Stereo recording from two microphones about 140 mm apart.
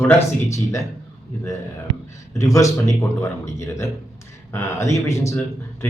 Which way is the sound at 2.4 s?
20° left (ahead or behind).